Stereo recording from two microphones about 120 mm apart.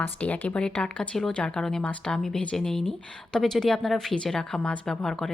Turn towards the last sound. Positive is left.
turn(degrees=5)  # may be behind; listen again after turning